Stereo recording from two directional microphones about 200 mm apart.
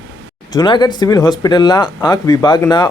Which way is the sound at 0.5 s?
20° left (ahead or behind).